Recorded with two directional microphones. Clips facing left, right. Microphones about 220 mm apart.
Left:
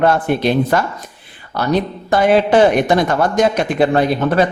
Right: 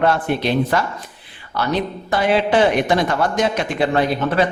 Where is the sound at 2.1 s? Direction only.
45° left (ahead or behind).